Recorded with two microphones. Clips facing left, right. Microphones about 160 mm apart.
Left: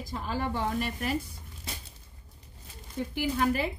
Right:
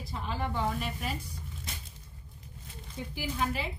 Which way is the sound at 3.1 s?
55° left (ahead or behind).